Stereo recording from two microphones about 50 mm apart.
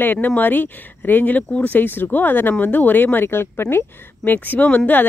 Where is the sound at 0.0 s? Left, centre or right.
Left.